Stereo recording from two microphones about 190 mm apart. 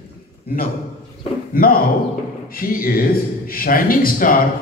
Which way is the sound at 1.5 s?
50° left (ahead or behind).